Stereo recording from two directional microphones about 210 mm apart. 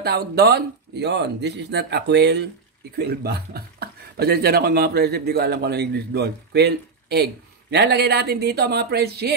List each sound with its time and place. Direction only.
0.0 s speech: 45° right (ahead or behind)